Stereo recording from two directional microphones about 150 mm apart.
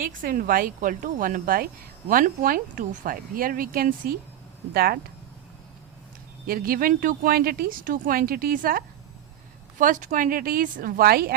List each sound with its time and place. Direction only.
0.0 s a woman's voice: 70° right (ahead or behind)
4.7 s speech: 90° right
6.5 s a woman's voice: 75° right (ahead or behind)
9.7 s a woman's voice: 60° right (ahead or behind); by 11.3 s 90° right